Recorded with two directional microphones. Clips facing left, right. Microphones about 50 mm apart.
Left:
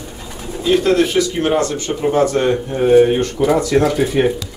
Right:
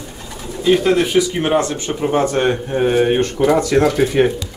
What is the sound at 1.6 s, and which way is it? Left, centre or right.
Speech, right.